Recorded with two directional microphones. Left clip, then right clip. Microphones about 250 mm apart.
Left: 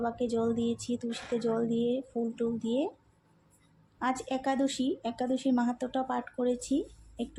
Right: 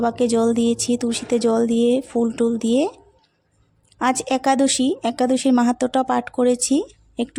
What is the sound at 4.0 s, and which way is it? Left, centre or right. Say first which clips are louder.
Speech: right 12 dB; right.